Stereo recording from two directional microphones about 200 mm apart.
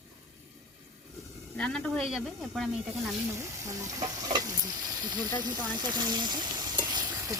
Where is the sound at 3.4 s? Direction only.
15° right (ahead or behind).